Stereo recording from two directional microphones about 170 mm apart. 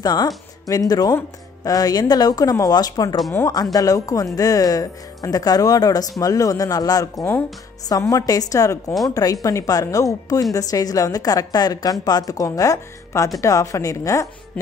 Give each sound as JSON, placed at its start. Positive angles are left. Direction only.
{"t": 0.0, "sound": "speech", "side_deg": 25}